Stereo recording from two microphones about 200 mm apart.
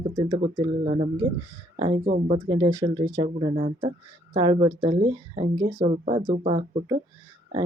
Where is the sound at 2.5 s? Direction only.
20° right (ahead or behind).